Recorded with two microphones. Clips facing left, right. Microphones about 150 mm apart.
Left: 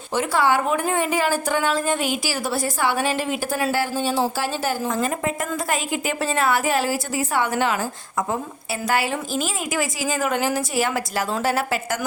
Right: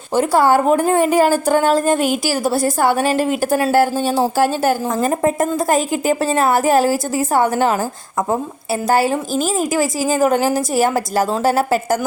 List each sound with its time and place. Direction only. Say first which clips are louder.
0.1 s a woman's voice: right 6 dB; 40° right (ahead or behind)